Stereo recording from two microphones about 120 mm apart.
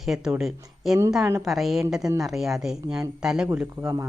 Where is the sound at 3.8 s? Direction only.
25° right (ahead or behind).